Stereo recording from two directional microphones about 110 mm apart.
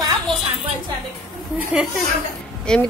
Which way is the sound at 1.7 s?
5° right (ahead or behind).